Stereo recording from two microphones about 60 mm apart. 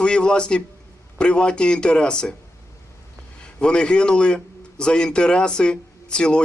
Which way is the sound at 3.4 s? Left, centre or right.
Centre.